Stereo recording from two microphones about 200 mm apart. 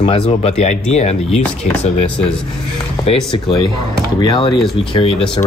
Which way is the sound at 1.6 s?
40° left (ahead or behind).